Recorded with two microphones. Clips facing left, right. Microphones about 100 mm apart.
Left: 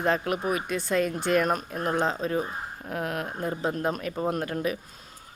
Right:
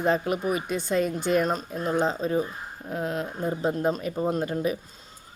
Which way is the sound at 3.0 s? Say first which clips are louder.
Right 2 dB; 65° left (ahead or behind).